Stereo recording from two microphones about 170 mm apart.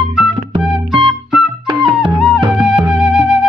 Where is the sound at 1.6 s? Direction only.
25° right (ahead or behind).